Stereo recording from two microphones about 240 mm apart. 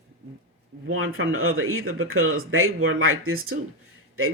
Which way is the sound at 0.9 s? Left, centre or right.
Right.